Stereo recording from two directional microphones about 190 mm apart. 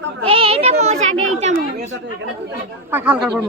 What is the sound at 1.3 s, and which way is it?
Chatter, 35° right (ahead or behind).